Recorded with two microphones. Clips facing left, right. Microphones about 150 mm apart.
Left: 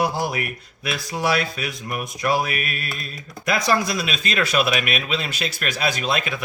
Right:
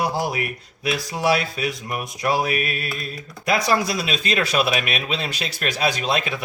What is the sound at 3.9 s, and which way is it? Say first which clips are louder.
Speech: right 1 dB; 35° right (ahead or behind).